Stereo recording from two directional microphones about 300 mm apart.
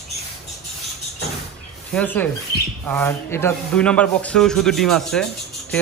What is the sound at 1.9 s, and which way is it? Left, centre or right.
Speech, centre.